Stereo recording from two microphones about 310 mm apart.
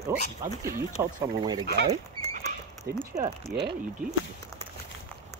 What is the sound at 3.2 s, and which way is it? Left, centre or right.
Speech, right.